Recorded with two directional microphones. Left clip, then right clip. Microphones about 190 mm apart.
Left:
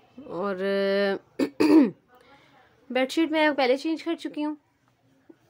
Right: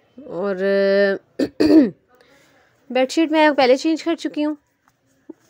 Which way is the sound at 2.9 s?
25° right (ahead or behind).